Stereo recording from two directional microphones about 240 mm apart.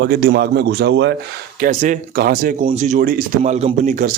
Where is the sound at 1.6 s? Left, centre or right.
Right.